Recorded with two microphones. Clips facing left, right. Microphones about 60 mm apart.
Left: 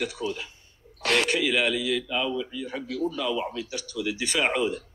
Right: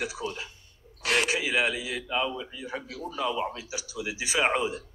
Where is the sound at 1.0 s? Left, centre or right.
Left.